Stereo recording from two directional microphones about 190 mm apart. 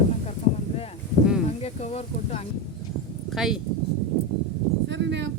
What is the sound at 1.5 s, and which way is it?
Speech, 35° left (ahead or behind).